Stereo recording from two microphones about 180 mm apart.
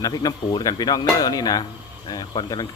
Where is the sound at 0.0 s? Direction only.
20° left (ahead or behind).